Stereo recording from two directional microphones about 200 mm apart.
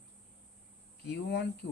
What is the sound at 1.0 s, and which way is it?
Speech, 60° left (ahead or behind).